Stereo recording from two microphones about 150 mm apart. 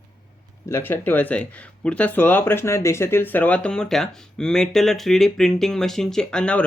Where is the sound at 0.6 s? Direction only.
15° left (ahead or behind).